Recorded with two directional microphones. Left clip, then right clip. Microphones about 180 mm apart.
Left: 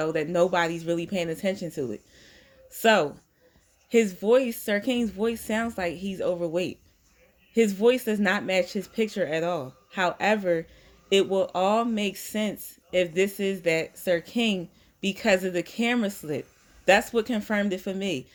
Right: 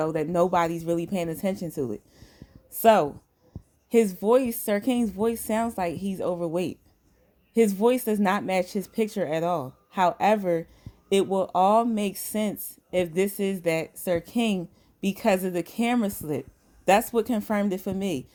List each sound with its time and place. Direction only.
0.0 s speech: 45° right (ahead or behind)